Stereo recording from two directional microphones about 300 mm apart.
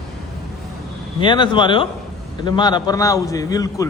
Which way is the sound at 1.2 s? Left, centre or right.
Centre.